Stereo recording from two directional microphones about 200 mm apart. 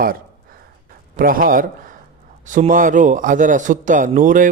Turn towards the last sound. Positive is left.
turn(degrees=-40)  # may be behind; listen again after turning